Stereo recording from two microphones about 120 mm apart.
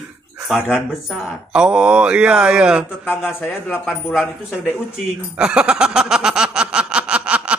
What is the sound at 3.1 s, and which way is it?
Speech, 20° left (ahead or behind).